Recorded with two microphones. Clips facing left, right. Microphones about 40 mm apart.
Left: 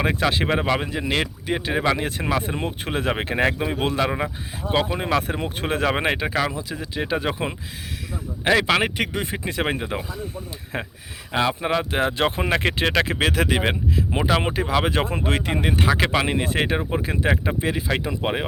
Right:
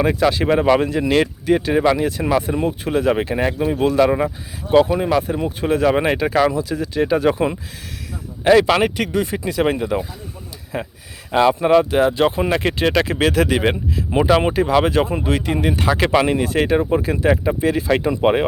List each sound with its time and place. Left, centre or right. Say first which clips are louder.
0.0 s speech: right 5 dB; left
0.8 s speech: right 7 dB; centre
2.0 s speech: right 6 dB; left
3.6 s speech: right 6 dB; left
3.8 s speech: right 9 dB; left
4.9 s speech: right 4 dB; left
5.2 s speech: right 5 dB; left
10.7 s speech: right 3 dB; left
11.3 s speech: right 8 dB; centre
11.9 s speech: right 6 dB; left; by 14.8 s centre
15.2 s speech: right 4 dB; left
15.6 s speech: right 1 dB; left
17.8 s speech: right 7 dB; centre
18.2 s speech: right 9 dB; centre